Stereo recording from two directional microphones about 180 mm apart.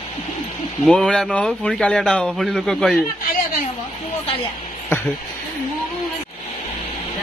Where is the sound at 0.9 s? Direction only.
5° left (ahead or behind).